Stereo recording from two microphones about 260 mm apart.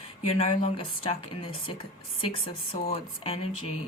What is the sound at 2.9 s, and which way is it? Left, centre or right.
Speech, left.